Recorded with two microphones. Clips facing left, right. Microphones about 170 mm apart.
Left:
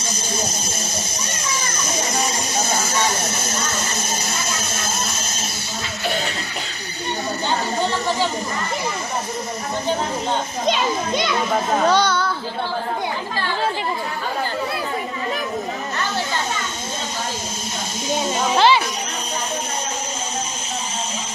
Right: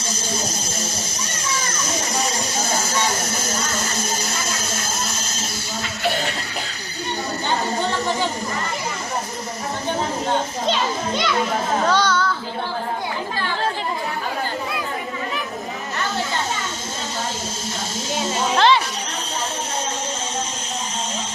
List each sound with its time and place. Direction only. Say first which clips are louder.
0.0 s children playing: left 1 dB; 20° left (ahead or behind)
10.7 s children playing: left 3 dB; 15° left (ahead or behind)
11.9 s child singing: even; 15° left (ahead or behind)
18.1 s snake: left 2 dB; 15° left (ahead or behind)